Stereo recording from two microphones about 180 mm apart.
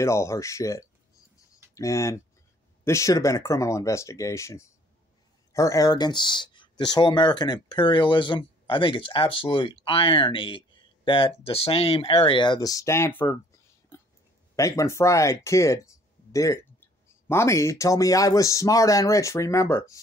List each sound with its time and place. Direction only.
0.0 s speech: 15° left (ahead or behind)
13.9 s a sound: 15° left (ahead or behind)
14.5 s speech: 15° left (ahead or behind)